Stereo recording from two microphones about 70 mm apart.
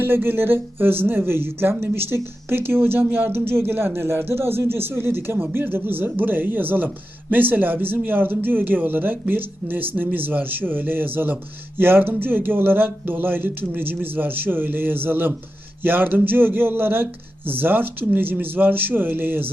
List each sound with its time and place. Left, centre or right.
0.0 s speech: right